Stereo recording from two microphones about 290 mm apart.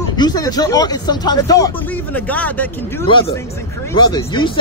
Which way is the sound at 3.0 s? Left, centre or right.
Centre.